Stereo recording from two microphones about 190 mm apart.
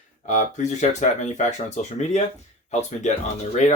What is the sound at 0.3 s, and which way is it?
Speech, 40° left (ahead or behind).